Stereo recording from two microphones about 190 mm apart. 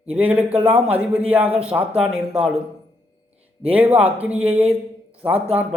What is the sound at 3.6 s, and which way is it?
A man's voice, 10° right (ahead or behind).